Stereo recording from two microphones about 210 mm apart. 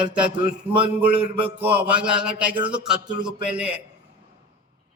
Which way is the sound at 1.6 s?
10° right (ahead or behind).